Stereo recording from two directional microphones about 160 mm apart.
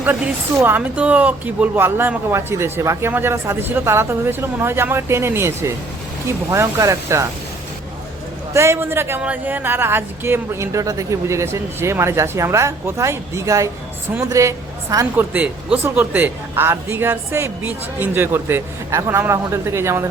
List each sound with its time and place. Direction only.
0.0 s speech: 10° right (ahead or behind)
8.5 s a woman's voice: 15° right (ahead or behind)